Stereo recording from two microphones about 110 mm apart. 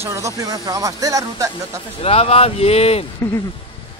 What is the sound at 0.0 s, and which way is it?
Speech, 30° right (ahead or behind).